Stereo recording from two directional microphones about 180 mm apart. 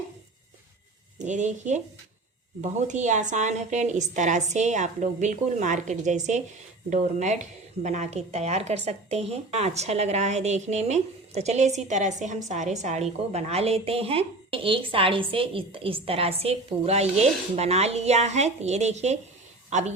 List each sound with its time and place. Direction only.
1.2 s a woman's voice: 40° right (ahead or behind)